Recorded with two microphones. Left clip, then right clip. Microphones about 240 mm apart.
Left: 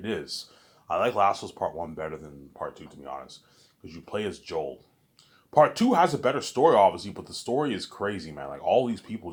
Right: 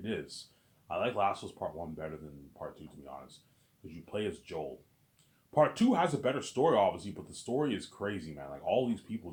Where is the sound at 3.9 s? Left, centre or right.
Left.